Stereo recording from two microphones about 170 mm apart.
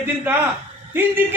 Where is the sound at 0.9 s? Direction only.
10° right (ahead or behind).